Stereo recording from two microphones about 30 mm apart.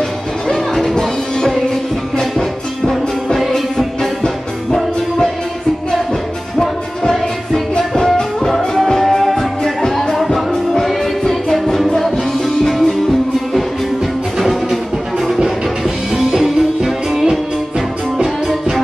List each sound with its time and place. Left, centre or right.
0.5 s music: centre
3.3 s music: centre
6.6 s music: centre
9.8 s music: centre
10.1 s music: centre
10.5 s music: centre
14.4 s music: centre
17.1 s music: centre